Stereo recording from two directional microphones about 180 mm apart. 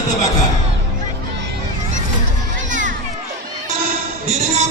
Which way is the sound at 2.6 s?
45° right (ahead or behind).